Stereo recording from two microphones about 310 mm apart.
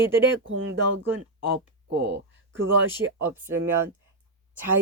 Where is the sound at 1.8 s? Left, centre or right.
Right.